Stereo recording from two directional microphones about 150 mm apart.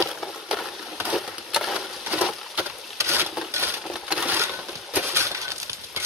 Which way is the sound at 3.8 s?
5° right (ahead or behind).